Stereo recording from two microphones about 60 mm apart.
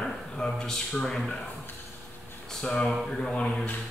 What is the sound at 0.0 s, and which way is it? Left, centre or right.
Speech, centre.